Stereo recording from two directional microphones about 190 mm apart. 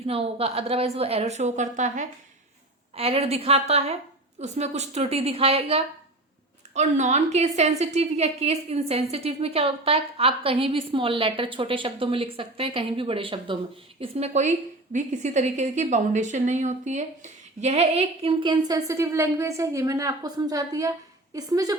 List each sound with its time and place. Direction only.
0.0 s a woman's voice: 30° right (ahead or behind)